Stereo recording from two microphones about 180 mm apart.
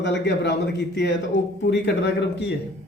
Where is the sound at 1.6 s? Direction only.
70° left (ahead or behind).